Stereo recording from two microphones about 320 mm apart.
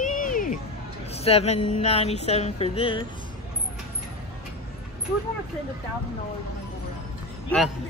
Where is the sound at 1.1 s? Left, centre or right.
Centre.